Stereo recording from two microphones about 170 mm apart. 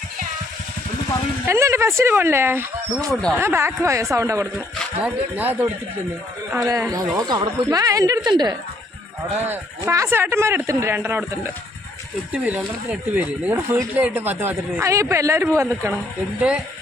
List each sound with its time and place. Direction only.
1.5 s speech: 15° right (ahead or behind)
3.1 s speech: 5° left (ahead or behind)
3.3 s speech: 15° right (ahead or behind)
9.4 s speech: 15° right (ahead or behind)